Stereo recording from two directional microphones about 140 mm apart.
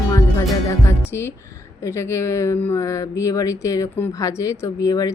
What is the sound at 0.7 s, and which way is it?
Music, 20° left (ahead or behind).